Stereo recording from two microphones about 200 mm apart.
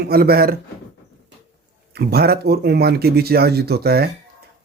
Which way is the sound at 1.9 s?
50° right (ahead or behind).